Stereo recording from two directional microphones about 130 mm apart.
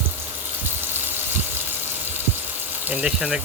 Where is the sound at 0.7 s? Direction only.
15° right (ahead or behind).